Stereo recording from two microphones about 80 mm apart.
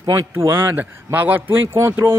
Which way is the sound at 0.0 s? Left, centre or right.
Right.